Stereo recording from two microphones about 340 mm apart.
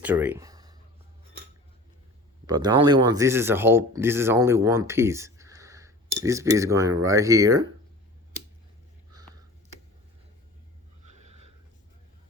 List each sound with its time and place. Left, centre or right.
0.0 s a sound: centre
2.5 s speech: centre
11.0 s snort: centre